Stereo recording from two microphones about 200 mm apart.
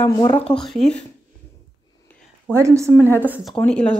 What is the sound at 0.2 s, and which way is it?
Speech, 25° left (ahead or behind).